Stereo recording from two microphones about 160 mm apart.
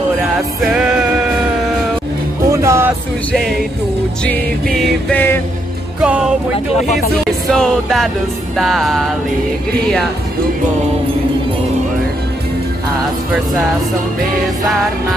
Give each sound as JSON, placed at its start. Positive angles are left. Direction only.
{"t": 0.6, "sound": "music", "side_deg": -5}
{"t": 2.5, "sound": "music", "side_deg": -15}
{"t": 3.3, "sound": "music", "side_deg": 0}
{"t": 7.4, "sound": "music", "side_deg": 5}